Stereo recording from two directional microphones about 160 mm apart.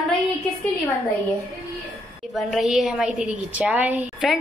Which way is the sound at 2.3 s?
Centre (ahead or behind).